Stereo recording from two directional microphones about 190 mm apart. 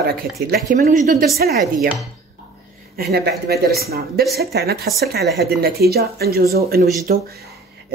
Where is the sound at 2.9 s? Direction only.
55° right (ahead or behind).